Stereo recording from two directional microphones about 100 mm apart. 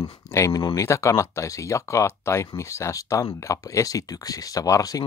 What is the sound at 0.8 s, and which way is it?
Speech, 30° left (ahead or behind).